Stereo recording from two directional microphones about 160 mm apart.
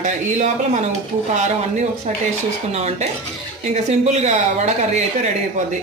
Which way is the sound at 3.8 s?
45° right (ahead or behind).